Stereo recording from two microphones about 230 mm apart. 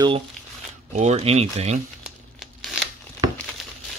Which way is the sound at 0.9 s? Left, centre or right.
Right.